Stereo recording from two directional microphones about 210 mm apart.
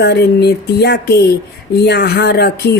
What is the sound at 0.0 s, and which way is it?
Speech, 50° left (ahead or behind).